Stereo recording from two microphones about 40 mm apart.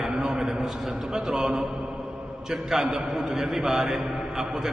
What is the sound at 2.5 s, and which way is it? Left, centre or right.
A man's voice, centre.